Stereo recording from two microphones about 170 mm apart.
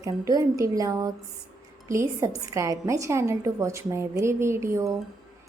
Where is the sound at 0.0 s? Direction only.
20° right (ahead or behind).